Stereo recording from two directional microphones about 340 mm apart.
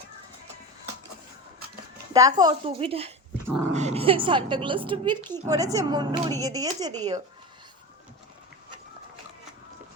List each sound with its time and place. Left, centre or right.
2.1 s speech: centre